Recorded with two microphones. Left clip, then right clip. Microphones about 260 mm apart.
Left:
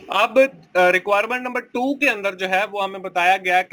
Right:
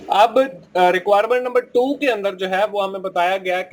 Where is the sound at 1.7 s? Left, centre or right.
Left.